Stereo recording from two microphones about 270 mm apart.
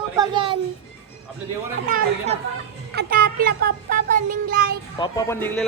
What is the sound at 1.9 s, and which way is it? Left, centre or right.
Speech, right.